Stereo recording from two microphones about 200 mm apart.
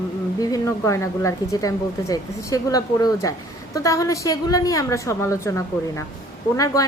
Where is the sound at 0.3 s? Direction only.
15° left (ahead or behind).